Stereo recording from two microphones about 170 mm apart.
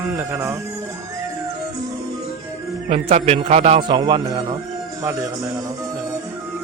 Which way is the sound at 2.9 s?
40° right (ahead or behind).